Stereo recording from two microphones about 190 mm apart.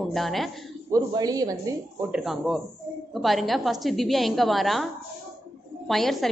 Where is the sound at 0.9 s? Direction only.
20° right (ahead or behind).